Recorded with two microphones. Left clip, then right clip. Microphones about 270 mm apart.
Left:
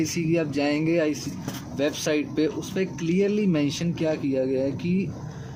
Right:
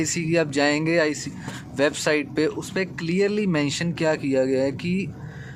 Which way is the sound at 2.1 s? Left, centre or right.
Right.